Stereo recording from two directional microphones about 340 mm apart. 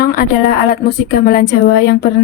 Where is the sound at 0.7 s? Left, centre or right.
Left.